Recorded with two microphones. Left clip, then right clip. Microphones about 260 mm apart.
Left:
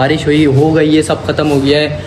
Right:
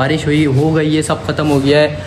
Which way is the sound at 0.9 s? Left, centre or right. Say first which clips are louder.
Left 4 dB; centre.